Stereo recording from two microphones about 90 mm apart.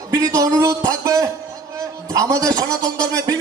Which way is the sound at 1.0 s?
40° right (ahead or behind).